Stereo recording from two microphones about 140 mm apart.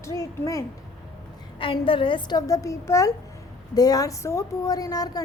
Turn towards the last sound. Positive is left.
turn(degrees=25)  # may be behind; listen again after turning